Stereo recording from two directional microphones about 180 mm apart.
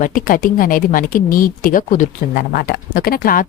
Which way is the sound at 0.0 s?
50° left (ahead or behind).